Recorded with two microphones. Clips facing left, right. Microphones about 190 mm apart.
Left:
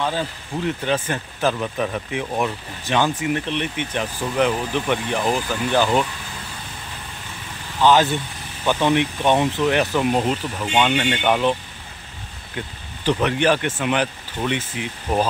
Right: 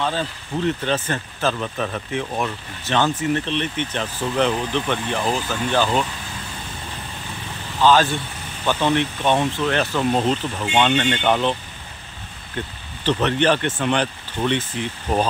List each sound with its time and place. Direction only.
0.7 s speech: 10° left (ahead or behind)
7.8 s speech: 20° left (ahead or behind)
12.5 s speech: 10° left (ahead or behind)